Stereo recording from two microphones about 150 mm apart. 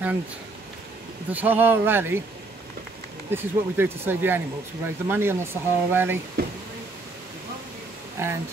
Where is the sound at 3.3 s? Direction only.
15° right (ahead or behind).